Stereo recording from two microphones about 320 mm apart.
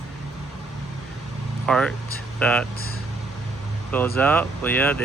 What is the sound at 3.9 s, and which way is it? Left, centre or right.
Speech, centre.